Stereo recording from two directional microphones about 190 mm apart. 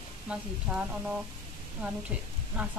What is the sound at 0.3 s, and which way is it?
A woman's voice, 5° right (ahead or behind).